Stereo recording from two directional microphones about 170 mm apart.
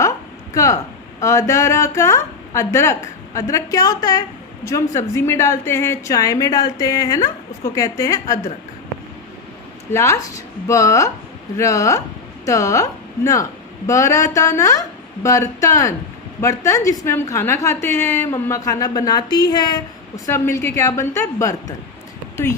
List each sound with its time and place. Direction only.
0.5 s a woman's voice: 20° left (ahead or behind)
9.9 s a woman's voice: 15° left (ahead or behind)